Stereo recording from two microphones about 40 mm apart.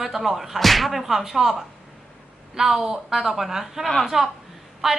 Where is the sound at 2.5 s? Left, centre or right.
Centre.